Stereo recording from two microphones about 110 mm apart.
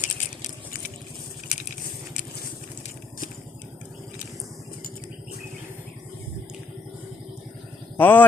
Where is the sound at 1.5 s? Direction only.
90° left.